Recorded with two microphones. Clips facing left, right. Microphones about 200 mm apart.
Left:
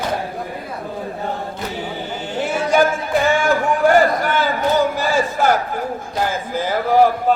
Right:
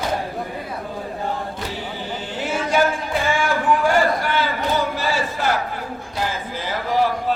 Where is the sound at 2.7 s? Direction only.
45° left (ahead or behind).